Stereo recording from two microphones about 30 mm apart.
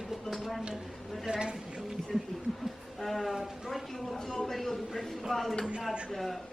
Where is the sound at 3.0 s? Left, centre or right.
Centre.